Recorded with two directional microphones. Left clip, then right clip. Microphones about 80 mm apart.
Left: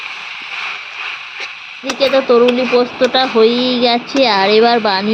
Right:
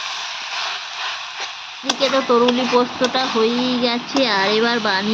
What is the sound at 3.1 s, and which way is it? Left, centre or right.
Speech, left.